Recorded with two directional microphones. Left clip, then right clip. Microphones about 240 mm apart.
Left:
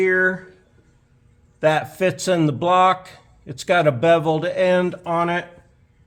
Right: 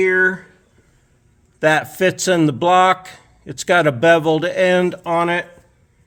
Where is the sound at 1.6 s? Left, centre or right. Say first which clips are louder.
Right 3 dB; right.